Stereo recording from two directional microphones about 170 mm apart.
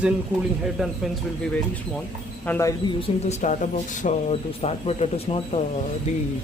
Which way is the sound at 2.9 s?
35° left (ahead or behind).